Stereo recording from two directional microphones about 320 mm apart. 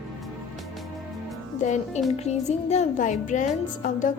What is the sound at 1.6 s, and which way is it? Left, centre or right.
Speech, left.